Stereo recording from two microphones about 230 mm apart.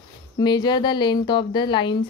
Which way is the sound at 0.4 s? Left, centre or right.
Centre.